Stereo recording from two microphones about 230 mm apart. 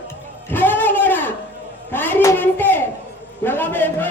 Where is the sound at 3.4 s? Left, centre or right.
Centre.